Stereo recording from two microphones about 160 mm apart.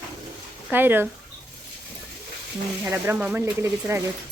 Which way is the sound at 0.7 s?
10° right (ahead or behind).